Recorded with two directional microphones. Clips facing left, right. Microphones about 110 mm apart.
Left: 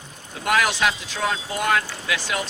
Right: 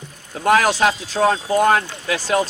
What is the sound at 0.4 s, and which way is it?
Speech, 40° right (ahead or behind).